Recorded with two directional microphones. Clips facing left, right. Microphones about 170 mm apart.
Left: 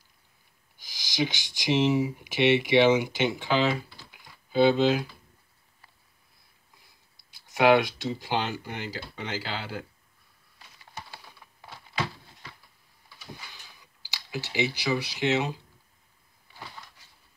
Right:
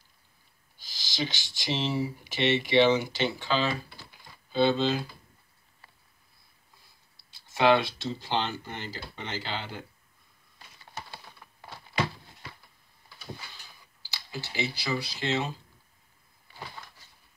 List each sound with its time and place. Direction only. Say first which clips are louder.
0.7 s speech: left 5 dB; 15° left (ahead or behind)
7.2 s speech: left 2 dB; 15° left (ahead or behind)
14.1 s speech: left 4 dB; 15° left (ahead or behind)